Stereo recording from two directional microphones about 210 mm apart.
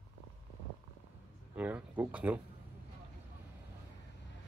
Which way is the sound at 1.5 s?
5° right (ahead or behind).